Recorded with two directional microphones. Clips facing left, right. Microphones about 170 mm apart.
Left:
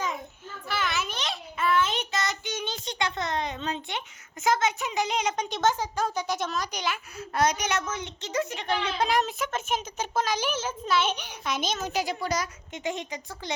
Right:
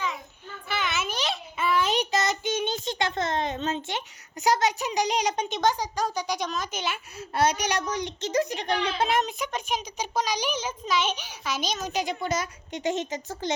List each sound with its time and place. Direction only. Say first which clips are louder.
0.7 s child singing: right 1 dB; centre (ahead or behind); by 2.3 s 20° right (ahead or behind)
2.6 s child singing: right 3 dB; 45° right (ahead or behind)
3.2 s a woman's voice: right 3 dB; 25° right (ahead or behind)
3.7 s a child's voice: right 2 dB; 40° right (ahead or behind)
5.5 s a child's voice: even; 15° right (ahead or behind); by 8.9 s 40° right (ahead or behind)
9.0 s a child's voice: even; 25° right (ahead or behind)
11.9 s a woman's voice: right 1 dB; 20° right (ahead or behind)
13.1 s speech: right 6 dB; 45° right (ahead or behind)